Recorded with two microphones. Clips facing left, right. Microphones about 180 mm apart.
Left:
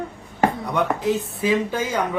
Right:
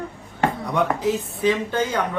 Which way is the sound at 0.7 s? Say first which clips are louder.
Even; centre (ahead or behind).